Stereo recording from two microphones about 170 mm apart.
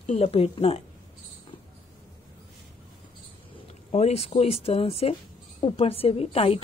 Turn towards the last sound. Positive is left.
turn(degrees=35)  # may be behind; listen again after turning